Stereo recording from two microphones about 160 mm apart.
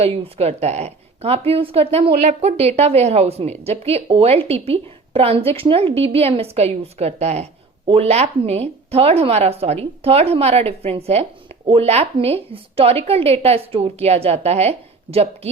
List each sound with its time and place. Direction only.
0.0 s a woman's voice: 40° right (ahead or behind)